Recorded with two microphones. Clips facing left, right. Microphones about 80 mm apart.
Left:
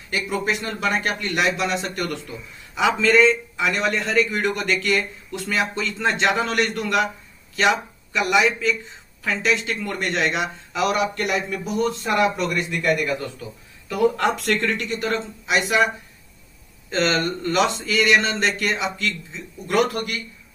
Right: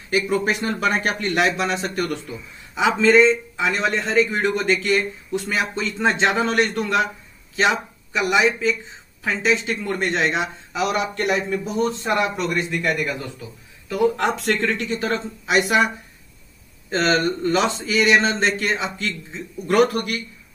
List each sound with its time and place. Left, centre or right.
0.1 s a man's voice: right
2.7 s a man's voice: right
16.9 s a man's voice: right